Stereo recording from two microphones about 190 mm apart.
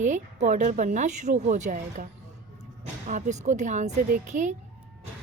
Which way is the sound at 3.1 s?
40° right (ahead or behind).